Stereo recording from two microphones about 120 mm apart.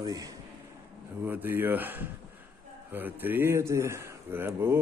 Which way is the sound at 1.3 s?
15° right (ahead or behind).